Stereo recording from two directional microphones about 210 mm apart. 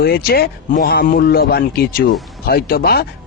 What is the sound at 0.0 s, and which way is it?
Speech, 45° left (ahead or behind).